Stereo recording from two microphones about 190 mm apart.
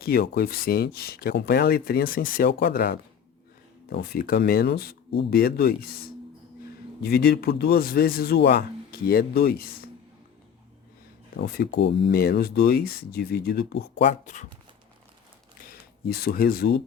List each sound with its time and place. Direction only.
0.0 s speech: 55° left (ahead or behind)
11.3 s speech: 55° left (ahead or behind)
15.7 s speech: 55° left (ahead or behind)